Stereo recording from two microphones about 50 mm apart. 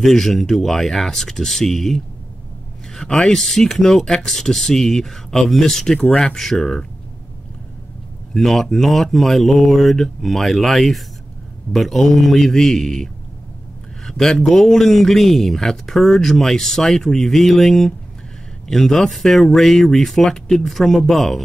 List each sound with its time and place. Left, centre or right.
0.0 s a man's voice: centre
8.3 s speech: centre